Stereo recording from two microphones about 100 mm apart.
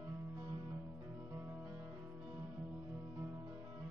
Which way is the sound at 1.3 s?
20° right (ahead or behind).